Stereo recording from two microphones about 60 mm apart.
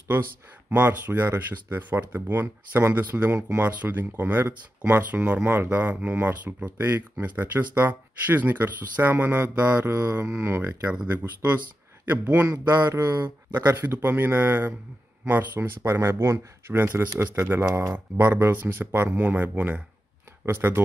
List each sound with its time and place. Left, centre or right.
0.7 s a man's voice: right
12.6 s speech: right
13.5 s a man's voice: right
15.8 s a man's voice: right